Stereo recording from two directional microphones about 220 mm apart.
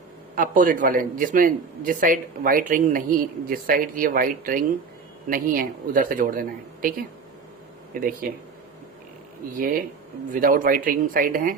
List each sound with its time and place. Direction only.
0.3 s a man's voice: 35° right (ahead or behind)
9.6 s a man's voice: 40° right (ahead or behind)